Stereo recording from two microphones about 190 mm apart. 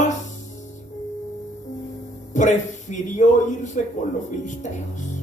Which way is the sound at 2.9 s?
40° left (ahead or behind).